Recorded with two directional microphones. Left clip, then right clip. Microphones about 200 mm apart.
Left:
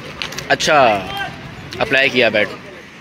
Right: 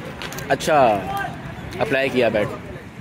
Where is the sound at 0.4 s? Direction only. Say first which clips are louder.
Left 4 dB; centre (ahead or behind).